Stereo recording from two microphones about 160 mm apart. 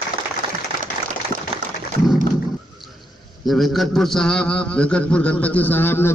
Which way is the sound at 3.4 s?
Centre (ahead or behind).